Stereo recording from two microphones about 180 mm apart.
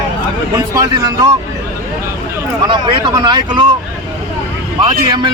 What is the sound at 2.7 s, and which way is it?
Speech, 25° right (ahead or behind).